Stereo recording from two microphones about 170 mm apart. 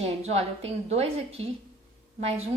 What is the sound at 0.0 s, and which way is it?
A woman's voice, 40° right (ahead or behind).